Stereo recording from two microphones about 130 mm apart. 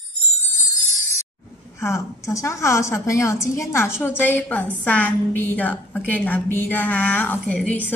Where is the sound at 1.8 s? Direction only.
20° left (ahead or behind).